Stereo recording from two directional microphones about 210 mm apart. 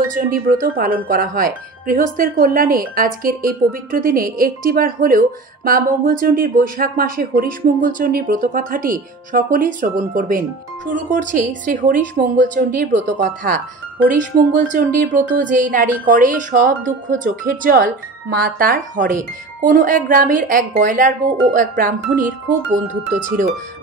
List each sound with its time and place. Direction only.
0.0 s speech: 40° right (ahead or behind)
14.7 s speech: 40° right (ahead or behind)